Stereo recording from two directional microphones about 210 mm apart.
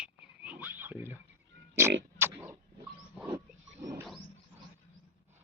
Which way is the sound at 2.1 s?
10° right (ahead or behind).